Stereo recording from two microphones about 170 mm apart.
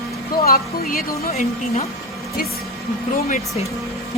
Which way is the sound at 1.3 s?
40° left (ahead or behind).